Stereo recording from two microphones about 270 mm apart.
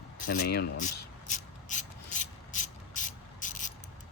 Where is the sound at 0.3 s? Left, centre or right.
Left.